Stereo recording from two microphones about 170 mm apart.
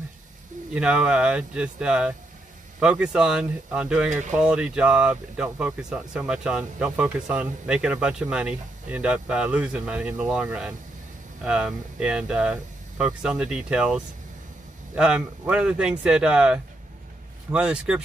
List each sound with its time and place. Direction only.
0.7 s speech: 5° right (ahead or behind)
4.1 s speech: 45° right (ahead or behind)
4.4 s speech: 5° right (ahead or behind)